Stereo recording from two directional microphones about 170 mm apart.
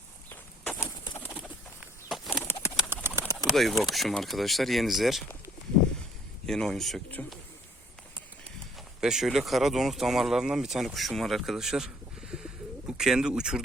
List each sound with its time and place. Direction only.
0.3 s walk: 10° left (ahead or behind)
0.9 s bird: 15° left (ahead or behind)
1.3 s bird: 10° right (ahead or behind)
2.0 s bird flight: centre (ahead or behind)
2.4 s pigeon: 15° left (ahead or behind)
2.9 s bird: 15° right (ahead or behind)
3.3 s speech: centre (ahead or behind)
6.4 s speech: 5° left (ahead or behind)
9.0 s speech: 5° right (ahead or behind)
12.9 s speech: 5° right (ahead or behind)